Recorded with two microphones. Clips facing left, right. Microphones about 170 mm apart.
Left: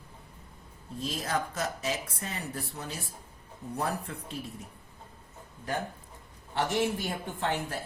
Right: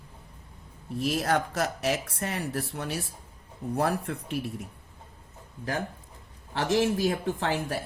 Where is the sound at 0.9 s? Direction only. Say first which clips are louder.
Right 6 dB; 80° right.